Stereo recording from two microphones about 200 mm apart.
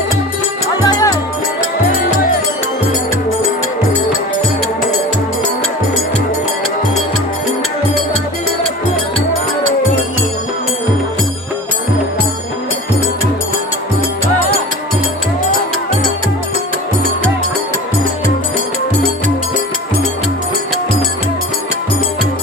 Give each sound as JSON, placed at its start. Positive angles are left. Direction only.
{"t": 0.8, "sound": "music", "side_deg": 20}